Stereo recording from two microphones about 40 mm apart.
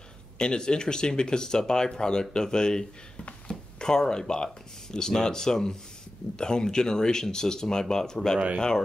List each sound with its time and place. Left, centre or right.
0.4 s speech: centre